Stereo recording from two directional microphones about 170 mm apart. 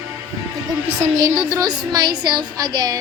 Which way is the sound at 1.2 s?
25° right (ahead or behind).